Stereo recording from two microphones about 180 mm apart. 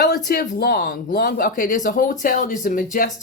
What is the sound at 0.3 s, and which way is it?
Speech, 60° left (ahead or behind).